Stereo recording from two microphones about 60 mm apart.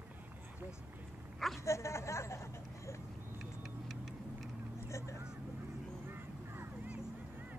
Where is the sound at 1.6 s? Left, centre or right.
Left.